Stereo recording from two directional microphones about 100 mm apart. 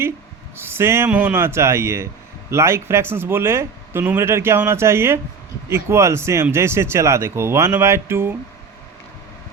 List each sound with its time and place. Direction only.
0.5 s speech: 25° right (ahead or behind)